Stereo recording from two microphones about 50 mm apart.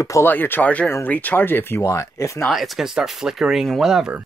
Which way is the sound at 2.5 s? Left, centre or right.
Centre.